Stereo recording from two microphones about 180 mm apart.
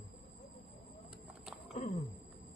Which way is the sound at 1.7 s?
35° left (ahead or behind).